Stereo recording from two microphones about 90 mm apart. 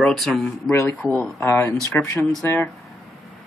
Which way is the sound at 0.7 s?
15° left (ahead or behind).